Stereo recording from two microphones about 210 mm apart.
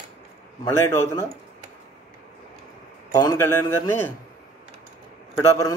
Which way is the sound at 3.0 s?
20° left (ahead or behind).